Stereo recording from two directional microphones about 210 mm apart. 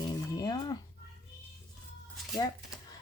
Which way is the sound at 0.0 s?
20° left (ahead or behind).